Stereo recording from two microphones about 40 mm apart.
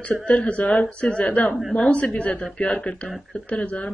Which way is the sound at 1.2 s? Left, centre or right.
Left.